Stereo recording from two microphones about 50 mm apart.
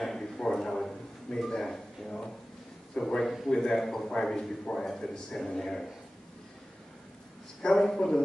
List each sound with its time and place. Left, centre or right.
0.0 s a sound: centre
2.9 s a man's voice: centre
7.7 s a man's voice: centre